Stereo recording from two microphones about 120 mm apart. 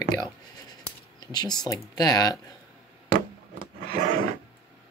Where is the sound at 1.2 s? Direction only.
35° left (ahead or behind).